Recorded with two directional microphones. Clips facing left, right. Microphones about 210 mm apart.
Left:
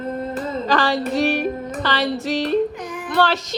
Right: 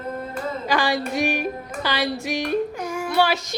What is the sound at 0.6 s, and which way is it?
Speech, 10° right (ahead or behind).